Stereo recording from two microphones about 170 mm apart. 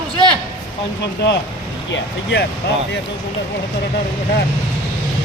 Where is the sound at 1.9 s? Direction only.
85° left.